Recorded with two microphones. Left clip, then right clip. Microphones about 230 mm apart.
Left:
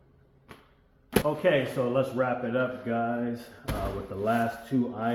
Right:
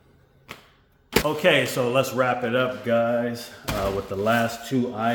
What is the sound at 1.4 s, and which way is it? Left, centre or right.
A man's voice, right.